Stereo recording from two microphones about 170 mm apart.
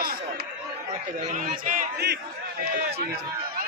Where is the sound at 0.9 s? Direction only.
45° right (ahead or behind).